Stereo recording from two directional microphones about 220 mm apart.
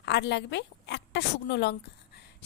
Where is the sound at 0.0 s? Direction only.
50° left (ahead or behind).